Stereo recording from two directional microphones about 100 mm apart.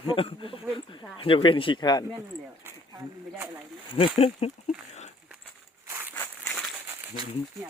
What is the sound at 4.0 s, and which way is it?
Speech, 85° left.